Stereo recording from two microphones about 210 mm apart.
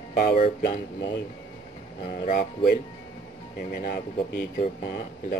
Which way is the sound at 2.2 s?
40° left (ahead or behind).